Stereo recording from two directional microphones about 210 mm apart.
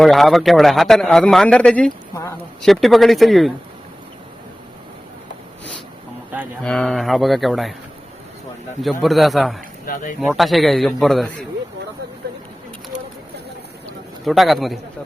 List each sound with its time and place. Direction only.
0.0 s a man's voice: centre (ahead or behind)
6.6 s a man's voice: 5° left (ahead or behind)
8.8 s a man's voice: centre (ahead or behind)
9.8 s speech: 40° left (ahead or behind)
10.2 s a man's voice: centre (ahead or behind)
14.3 s a man's voice: centre (ahead or behind)